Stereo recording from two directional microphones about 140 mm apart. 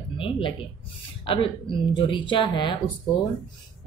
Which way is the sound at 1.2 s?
40° left (ahead or behind).